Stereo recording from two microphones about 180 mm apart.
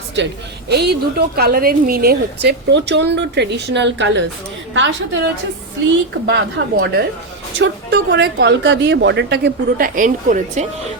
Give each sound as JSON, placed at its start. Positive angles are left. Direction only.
{"t": 0.7, "sound": "a woman's voice", "side_deg": -65}
{"t": 6.2, "sound": "a woman's voice", "side_deg": -70}
{"t": 7.6, "sound": "a woman's voice", "side_deg": -85}